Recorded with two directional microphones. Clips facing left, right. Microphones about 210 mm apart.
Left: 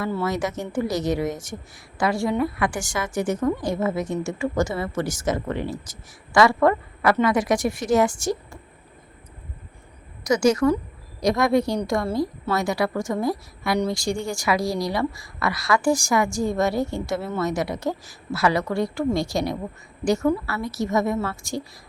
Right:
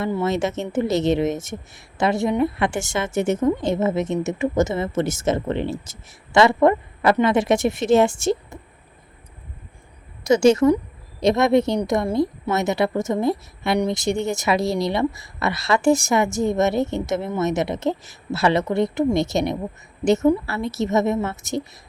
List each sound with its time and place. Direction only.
0.0 s a woman's voice: 25° right (ahead or behind)
10.2 s a woman's voice: 25° right (ahead or behind)